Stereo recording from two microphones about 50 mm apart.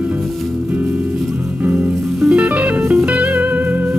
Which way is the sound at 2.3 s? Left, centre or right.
Right.